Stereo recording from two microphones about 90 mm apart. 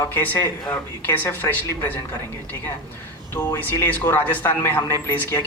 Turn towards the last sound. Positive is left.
turn(degrees=30)  # may be behind; listen again after turning